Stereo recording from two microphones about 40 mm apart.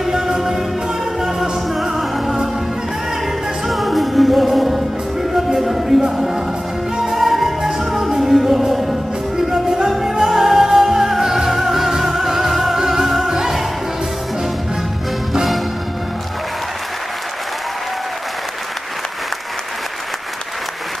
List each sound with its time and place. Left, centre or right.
0.0 s music: centre
3.6 s music: centre